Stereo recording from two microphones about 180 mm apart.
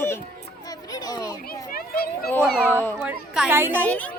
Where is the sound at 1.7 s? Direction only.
55° left (ahead or behind).